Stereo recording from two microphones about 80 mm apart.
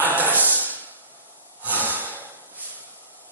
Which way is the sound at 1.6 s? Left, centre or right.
Right.